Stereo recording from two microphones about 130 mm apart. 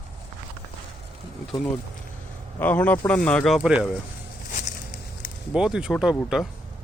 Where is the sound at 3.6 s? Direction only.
5° right (ahead or behind).